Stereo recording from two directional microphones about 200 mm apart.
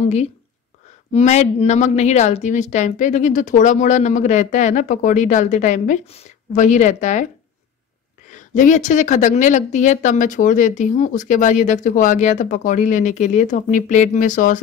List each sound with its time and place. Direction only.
0.0 s speech: 35° left (ahead or behind)
8.3 s speech: 40° left (ahead or behind)